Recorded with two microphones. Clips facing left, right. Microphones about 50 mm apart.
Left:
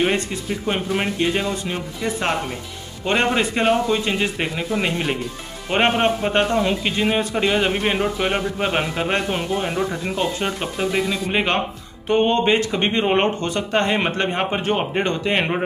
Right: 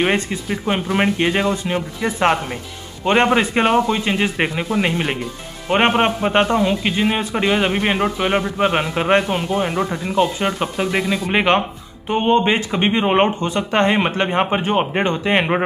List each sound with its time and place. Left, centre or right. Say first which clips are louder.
0.0 s a man's voice: right 2 dB; right
9.3 s a man's voice: right 3 dB; centre; by 13.9 s right
13.9 s a man's voice: right 3 dB; centre